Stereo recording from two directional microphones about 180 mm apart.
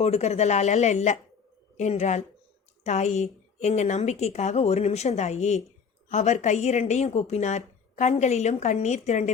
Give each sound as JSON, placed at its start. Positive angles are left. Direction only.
{"t": 0.0, "sound": "a woman's voice", "side_deg": 40}